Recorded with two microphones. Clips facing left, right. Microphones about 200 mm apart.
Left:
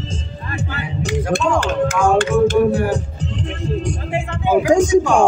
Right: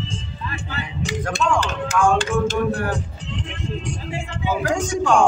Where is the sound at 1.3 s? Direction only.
55° left (ahead or behind).